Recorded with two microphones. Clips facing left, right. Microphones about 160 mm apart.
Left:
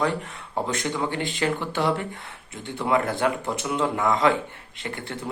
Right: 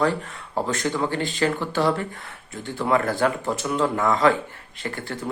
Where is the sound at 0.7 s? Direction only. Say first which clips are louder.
Right 3 dB; 20° left (ahead or behind).